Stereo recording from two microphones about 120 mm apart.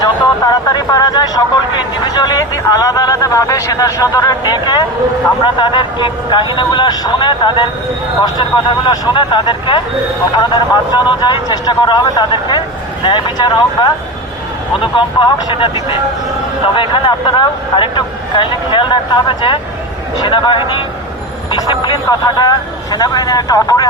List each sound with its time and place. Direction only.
0.0 s speech: 30° left (ahead or behind)
8.9 s speech: 40° left (ahead or behind)
16.7 s speech: 45° left (ahead or behind); by 23.9 s 30° left (ahead or behind)